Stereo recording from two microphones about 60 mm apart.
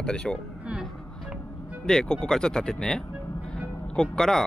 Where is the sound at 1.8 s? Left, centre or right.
Centre.